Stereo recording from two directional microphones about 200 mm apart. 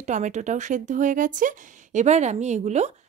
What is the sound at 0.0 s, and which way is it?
Speech, 35° right (ahead or behind).